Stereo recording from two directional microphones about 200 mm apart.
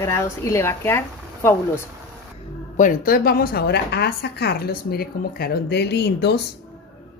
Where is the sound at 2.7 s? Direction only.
45° left (ahead or behind).